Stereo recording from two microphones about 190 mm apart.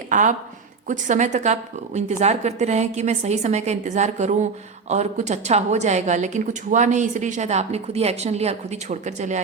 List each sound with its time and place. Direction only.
0.1 s a woman's voice: 40° right (ahead or behind)